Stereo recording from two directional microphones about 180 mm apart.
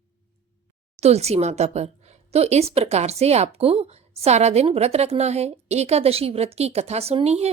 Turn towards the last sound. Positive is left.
turn(degrees=-35)  # may be behind; listen again after turning